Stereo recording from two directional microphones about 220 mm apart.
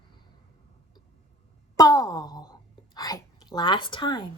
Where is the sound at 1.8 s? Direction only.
15° left (ahead or behind).